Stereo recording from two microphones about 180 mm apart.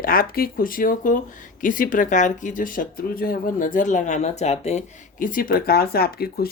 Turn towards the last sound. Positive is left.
turn(degrees=60)  # may be behind; listen again after turning